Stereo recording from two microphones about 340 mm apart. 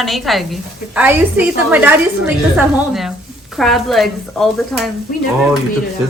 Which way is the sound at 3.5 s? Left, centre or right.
Centre.